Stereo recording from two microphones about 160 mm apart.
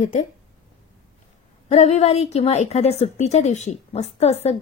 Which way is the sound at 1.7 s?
40° left (ahead or behind).